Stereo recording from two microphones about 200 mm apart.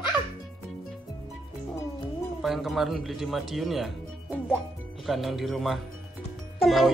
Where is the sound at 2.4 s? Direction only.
Centre (ahead or behind).